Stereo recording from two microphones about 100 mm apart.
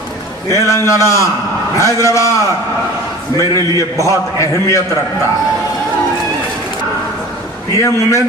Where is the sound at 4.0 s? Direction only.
30° left (ahead or behind).